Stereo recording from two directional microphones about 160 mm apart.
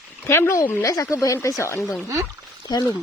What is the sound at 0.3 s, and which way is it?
Speech, 15° left (ahead or behind).